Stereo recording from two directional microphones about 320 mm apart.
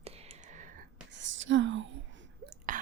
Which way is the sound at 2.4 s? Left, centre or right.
Right.